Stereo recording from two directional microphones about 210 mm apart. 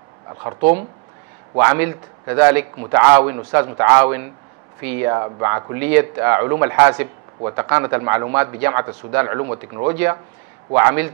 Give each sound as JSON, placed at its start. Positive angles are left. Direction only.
{"t": 0.5, "sound": "speech", "side_deg": -35}
{"t": 1.6, "sound": "speech", "side_deg": -15}